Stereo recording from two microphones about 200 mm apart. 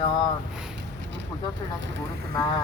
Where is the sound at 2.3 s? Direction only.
25° left (ahead or behind).